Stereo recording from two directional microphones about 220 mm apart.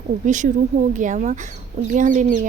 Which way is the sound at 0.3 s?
35° right (ahead or behind).